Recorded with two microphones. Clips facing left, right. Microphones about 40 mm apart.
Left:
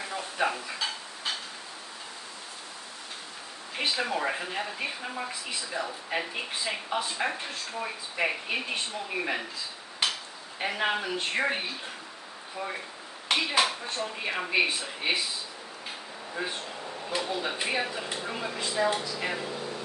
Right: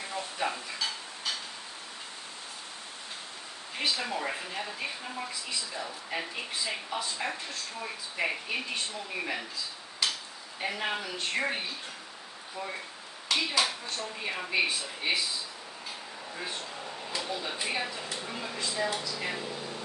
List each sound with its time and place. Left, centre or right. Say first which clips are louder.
0.1 s dishes: left 4 dB; left
3.7 s a woman's voice: left 3 dB; left
5.5 s speech: left 3 dB; left
5.9 s speech: left 3 dB; centre
10.0 s a sound: left 2 dB; left
10.6 s speech: left 4 dB; left
13.6 s speech: left 3 dB; left
16.3 s speech: left 4 dB; left
17.6 s speech: left 3 dB; left
18.7 s speech: left 5 dB; left
19.1 s speech: left 3 dB; centre